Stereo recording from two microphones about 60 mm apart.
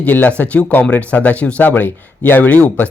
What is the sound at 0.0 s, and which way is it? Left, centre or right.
Speech, left.